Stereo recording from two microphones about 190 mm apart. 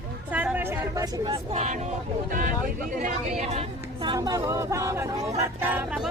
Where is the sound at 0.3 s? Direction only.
10° right (ahead or behind).